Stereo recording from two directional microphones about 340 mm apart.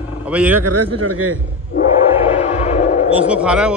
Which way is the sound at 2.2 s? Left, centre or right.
Centre.